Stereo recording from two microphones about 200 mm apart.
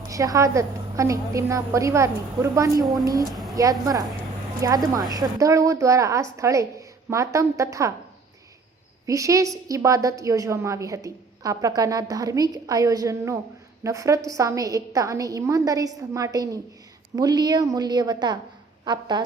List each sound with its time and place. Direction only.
0.1 s a woman's voice: 15° right (ahead or behind)
3.2 s a woman's voice: centre (ahead or behind)
3.5 s a woman's voice: 15° right (ahead or behind)
9.0 s a woman's voice: 15° right (ahead or behind)